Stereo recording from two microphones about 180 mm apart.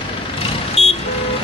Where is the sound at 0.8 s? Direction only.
35° left (ahead or behind).